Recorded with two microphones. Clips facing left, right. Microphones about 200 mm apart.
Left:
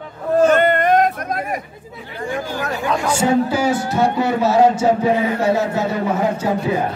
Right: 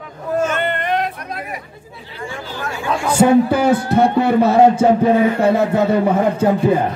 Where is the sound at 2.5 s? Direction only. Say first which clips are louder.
Left 3 dB; 40° left (ahead or behind).